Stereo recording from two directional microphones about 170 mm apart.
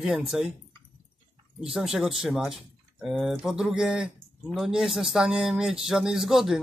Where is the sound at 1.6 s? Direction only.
5° right (ahead or behind).